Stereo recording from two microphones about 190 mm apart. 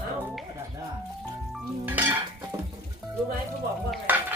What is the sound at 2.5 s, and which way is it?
Music, 15° right (ahead or behind).